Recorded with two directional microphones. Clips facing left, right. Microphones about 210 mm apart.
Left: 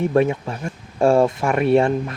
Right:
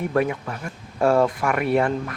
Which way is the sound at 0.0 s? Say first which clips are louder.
Left 4 dB; 25° left (ahead or behind).